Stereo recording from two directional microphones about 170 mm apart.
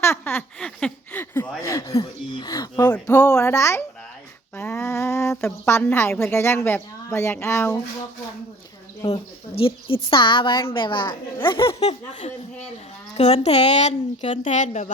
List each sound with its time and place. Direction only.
0.0 s speech: 15° left (ahead or behind)
4.5 s a sound: 15° left (ahead or behind)
6.3 s speech: 15° left (ahead or behind)
9.0 s a woman's voice: 35° left (ahead or behind)